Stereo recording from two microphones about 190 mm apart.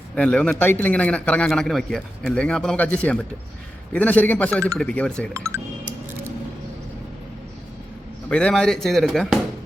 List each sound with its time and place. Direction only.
0.2 s a man's voice: 5° left (ahead or behind)
5.3 s speech: 15° right (ahead or behind)
8.3 s speech: 5° left (ahead or behind)